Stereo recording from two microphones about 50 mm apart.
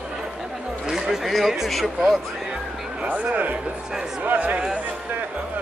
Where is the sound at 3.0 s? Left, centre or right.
Right.